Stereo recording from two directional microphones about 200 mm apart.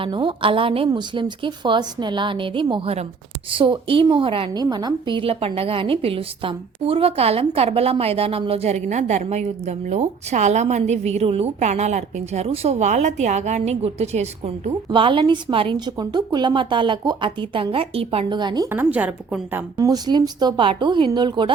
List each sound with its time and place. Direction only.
0.0 s a woman's voice: 25° right (ahead or behind); by 19.6 s 10° right (ahead or behind)
19.7 s a woman's voice: 20° right (ahead or behind)